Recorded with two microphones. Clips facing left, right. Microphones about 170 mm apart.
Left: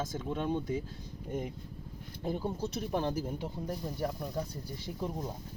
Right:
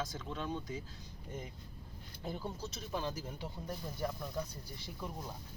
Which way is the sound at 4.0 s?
35° left (ahead or behind).